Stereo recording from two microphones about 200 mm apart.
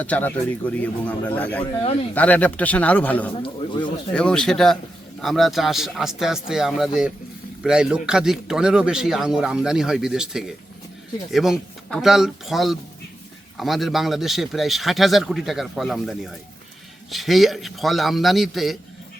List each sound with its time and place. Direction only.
0.0 s a man's voice: 10° left (ahead or behind)
3.3 s a man's voice: 25° left (ahead or behind)
4.1 s speech: 5° left (ahead or behind)